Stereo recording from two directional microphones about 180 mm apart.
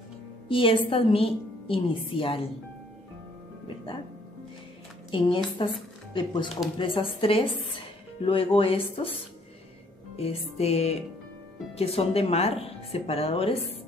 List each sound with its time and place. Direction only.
0.5 s a woman's voice: 30° left (ahead or behind)
5.1 s a woman's voice: 30° left (ahead or behind)
10.1 s speech: 35° left (ahead or behind)